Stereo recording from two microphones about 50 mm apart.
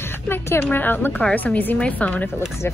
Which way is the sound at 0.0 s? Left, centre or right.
Left.